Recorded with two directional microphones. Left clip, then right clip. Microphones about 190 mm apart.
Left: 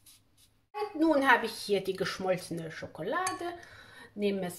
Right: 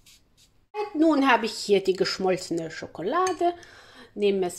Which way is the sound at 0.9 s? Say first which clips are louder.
Right 4 dB; 35° right (ahead or behind).